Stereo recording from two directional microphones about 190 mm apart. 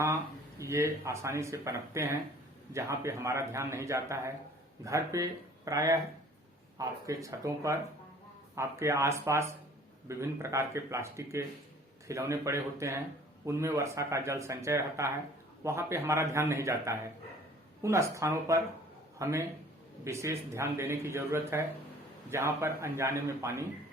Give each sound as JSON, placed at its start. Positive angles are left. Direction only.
{"t": 0.6, "sound": "speech", "side_deg": -15}